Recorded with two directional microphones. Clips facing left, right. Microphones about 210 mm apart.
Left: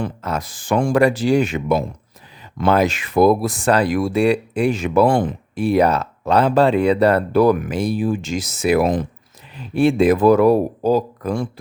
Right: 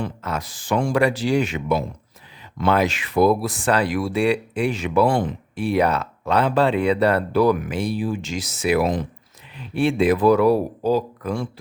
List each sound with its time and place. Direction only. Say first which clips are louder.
0.0 s speech: left 3 dB; 40° left (ahead or behind)